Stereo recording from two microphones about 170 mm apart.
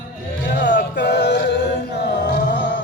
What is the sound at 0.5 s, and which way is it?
Music, 90° left.